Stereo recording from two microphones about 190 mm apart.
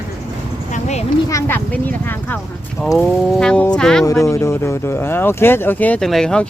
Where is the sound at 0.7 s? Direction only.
35° left (ahead or behind).